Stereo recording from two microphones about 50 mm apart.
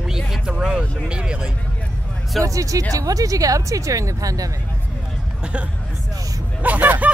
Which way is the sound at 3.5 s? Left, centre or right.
Right.